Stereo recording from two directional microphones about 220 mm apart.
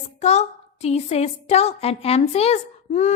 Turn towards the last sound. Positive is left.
turn(degrees=30)  # may be behind; listen again after turning